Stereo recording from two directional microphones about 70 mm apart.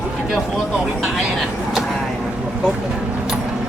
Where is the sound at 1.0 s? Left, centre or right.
Centre.